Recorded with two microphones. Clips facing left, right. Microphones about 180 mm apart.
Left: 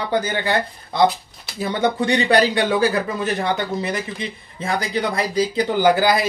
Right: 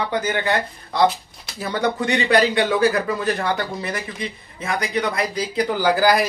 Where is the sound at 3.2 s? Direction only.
20° left (ahead or behind).